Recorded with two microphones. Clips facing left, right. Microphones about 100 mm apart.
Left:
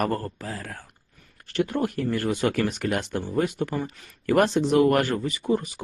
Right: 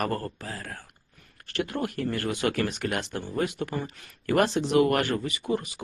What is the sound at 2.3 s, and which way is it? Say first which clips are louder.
Speech: left 3 dB; 45° left (ahead or behind).